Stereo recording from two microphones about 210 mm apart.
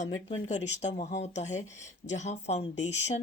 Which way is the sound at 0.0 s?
35° left (ahead or behind).